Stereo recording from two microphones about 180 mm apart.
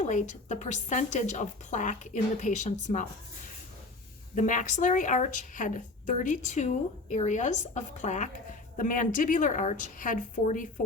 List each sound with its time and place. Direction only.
0.0 s a woman's voice: 40° left (ahead or behind)
4.4 s a woman's voice: 45° left (ahead or behind)